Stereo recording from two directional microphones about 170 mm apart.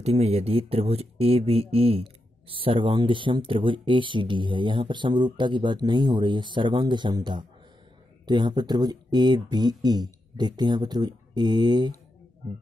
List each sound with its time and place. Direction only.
0.0 s speech: 40° right (ahead or behind)